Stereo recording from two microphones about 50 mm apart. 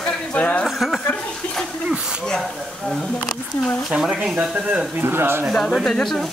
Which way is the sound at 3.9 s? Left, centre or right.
Centre.